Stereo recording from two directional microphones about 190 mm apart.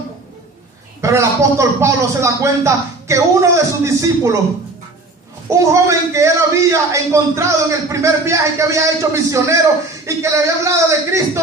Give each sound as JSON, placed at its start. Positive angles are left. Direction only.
{"t": 1.0, "sound": "a man's voice", "side_deg": -15}
{"t": 5.5, "sound": "a man's voice", "side_deg": -15}